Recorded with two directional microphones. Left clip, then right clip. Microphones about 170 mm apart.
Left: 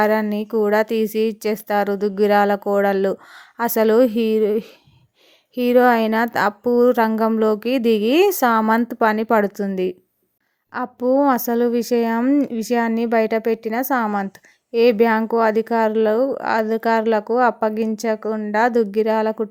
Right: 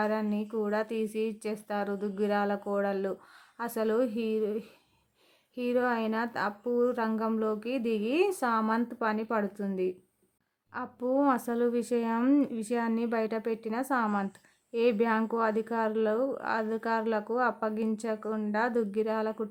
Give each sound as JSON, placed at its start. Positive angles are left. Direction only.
{"t": 0.0, "sound": "a woman's voice", "side_deg": 40}